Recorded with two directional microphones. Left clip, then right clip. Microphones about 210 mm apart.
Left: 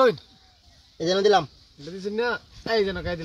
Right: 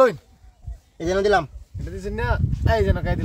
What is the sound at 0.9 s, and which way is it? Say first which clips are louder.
Speech: even; 40° right (ahead or behind).